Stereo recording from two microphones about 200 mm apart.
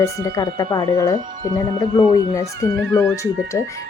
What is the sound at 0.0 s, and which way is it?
Speech, 15° left (ahead or behind).